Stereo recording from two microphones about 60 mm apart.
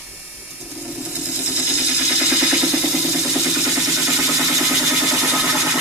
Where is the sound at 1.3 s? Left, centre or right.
Right.